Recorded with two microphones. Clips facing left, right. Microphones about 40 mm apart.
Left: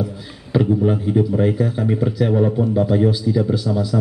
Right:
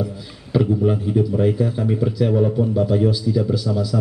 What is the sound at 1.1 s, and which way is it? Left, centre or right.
A man's voice, left.